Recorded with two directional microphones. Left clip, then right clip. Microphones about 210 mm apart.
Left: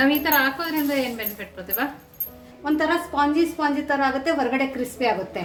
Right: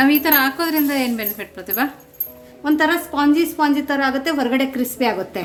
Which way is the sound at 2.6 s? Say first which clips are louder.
Right 5 dB; 35° right (ahead or behind).